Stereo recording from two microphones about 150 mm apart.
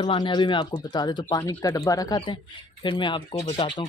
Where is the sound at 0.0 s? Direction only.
30° left (ahead or behind).